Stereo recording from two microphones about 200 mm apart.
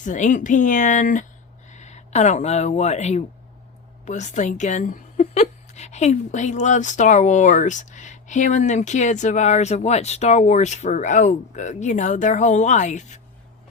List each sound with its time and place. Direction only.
0.0 s speech: 40° left (ahead or behind)